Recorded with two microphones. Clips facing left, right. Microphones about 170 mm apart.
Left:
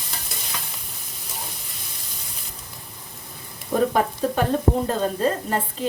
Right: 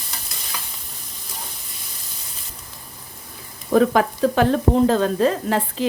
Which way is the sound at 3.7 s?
90° right.